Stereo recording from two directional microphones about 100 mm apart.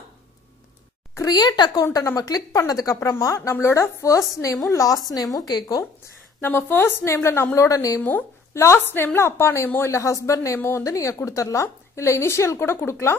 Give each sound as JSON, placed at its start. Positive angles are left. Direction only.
{"t": 1.1, "sound": "a woman's voice", "side_deg": 40}
{"t": 6.4, "sound": "a woman's voice", "side_deg": 20}
{"t": 8.0, "sound": "a woman's voice", "side_deg": 20}